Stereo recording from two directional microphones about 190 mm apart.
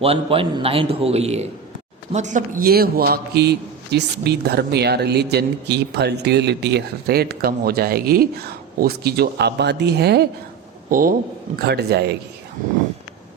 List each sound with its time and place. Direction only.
0.0 s a man's voice: 30° right (ahead or behind); by 10.2 s 60° right (ahead or behind)
10.8 s a man's voice: 50° right (ahead or behind)